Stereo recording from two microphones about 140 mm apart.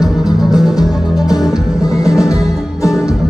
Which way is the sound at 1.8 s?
25° left (ahead or behind).